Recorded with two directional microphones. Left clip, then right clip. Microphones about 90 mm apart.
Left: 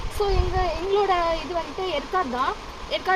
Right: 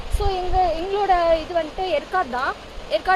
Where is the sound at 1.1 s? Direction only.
30° right (ahead or behind).